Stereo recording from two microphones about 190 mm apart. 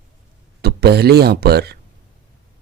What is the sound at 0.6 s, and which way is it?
Speech, 55° right (ahead or behind).